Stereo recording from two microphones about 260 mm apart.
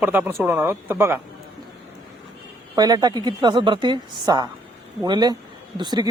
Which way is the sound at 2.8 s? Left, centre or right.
Centre.